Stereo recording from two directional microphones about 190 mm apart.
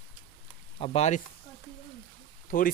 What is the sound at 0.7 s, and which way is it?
Speech, 30° left (ahead or behind).